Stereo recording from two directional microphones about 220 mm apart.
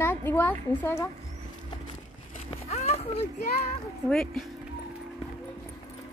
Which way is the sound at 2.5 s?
30° left (ahead or behind).